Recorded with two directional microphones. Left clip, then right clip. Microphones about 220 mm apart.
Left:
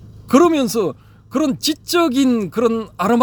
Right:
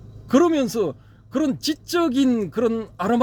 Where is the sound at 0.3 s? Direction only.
25° left (ahead or behind).